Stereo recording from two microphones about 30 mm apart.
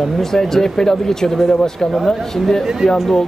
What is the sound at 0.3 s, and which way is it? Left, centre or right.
Speech, centre.